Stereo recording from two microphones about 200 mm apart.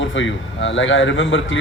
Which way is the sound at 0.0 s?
70° left (ahead or behind).